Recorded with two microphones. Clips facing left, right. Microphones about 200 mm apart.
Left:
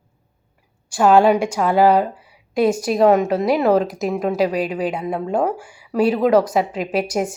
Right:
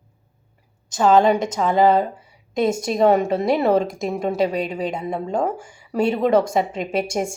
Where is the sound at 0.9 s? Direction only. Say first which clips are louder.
Left 2 dB; 10° left (ahead or behind).